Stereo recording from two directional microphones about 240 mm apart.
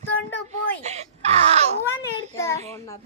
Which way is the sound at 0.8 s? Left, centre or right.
Right.